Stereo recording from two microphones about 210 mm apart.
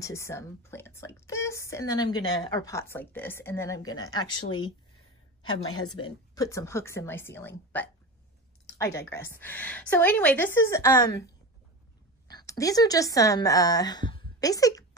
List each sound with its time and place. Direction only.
0.0 s speech: 15° left (ahead or behind)
6.0 s speech: 15° left (ahead or behind)
12.3 s a woman's voice: 15° left (ahead or behind)